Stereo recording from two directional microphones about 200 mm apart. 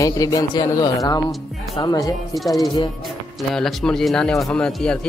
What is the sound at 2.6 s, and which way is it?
Music, 20° left (ahead or behind).